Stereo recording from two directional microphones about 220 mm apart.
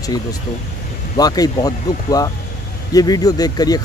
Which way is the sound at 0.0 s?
15° left (ahead or behind).